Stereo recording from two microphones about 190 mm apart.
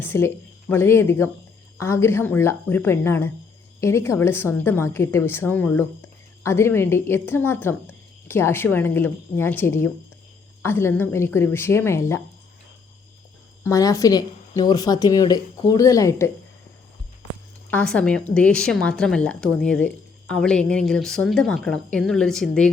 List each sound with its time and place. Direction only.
0.0 s a woman's voice: 10° left (ahead or behind)
13.7 s a woman's voice: 15° left (ahead or behind)
17.7 s speech: 5° left (ahead or behind)